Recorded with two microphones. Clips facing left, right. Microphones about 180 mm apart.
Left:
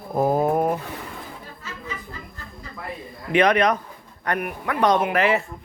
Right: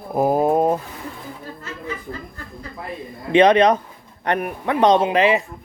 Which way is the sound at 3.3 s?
25° right (ahead or behind).